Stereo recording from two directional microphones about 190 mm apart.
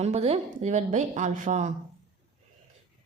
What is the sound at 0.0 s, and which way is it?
A woman's voice, 35° right (ahead or behind).